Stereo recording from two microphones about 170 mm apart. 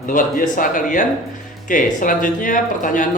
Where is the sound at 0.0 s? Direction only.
55° left (ahead or behind).